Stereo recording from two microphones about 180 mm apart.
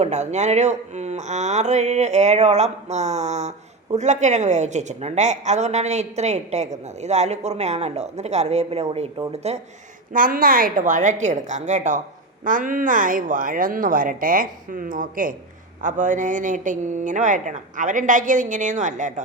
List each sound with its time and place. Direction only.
0.0 s a woman's voice: 40° right (ahead or behind)
10.1 s speech: 50° right (ahead or behind)